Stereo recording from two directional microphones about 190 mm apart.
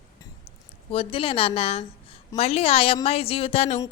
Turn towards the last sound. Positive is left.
turn(degrees=35)  # may be behind; listen again after turning